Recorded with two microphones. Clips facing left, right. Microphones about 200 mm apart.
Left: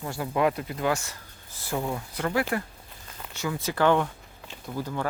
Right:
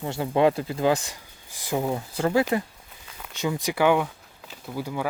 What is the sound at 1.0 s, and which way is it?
Speech, 15° right (ahead or behind).